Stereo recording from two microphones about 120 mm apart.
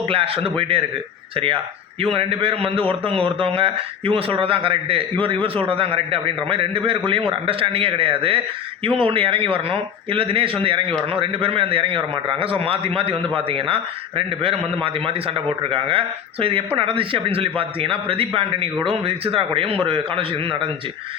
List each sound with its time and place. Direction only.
0.0 s a man's voice: 50° right (ahead or behind)
2.1 s a man's voice: 50° right (ahead or behind)